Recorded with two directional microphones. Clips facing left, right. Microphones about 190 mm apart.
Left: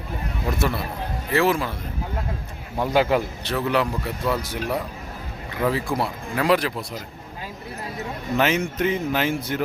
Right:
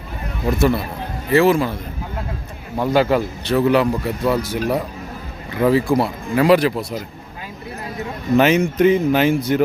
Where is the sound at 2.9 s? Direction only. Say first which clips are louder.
Right 3 dB; 15° left (ahead or behind).